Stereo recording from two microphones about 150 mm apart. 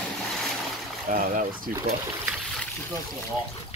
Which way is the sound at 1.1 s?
65° right (ahead or behind).